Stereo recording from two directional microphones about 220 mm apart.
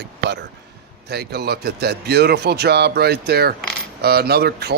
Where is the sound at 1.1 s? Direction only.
45° right (ahead or behind).